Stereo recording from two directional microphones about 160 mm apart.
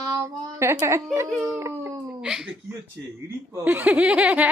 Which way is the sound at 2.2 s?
5° right (ahead or behind).